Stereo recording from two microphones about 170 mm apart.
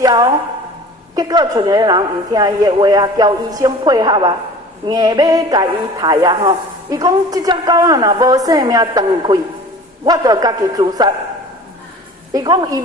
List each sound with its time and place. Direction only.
0.0 s speech: 25° right (ahead or behind)
12.3 s speech: 20° right (ahead or behind)